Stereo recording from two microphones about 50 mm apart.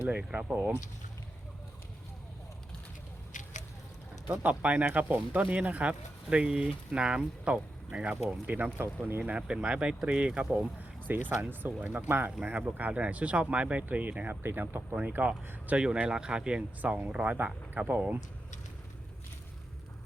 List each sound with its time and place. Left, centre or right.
0.0 s speech: centre
4.4 s speech: right
8.1 s speech: right
9.3 s speech: right
11.1 s speech: right